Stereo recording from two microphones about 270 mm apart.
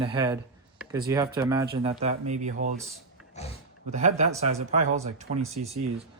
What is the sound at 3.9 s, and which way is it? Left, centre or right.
Speech, right.